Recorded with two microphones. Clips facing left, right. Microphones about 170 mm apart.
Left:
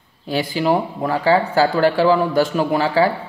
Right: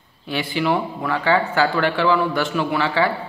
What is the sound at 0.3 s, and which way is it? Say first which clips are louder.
Speech: left 3 dB; 40° left (ahead or behind).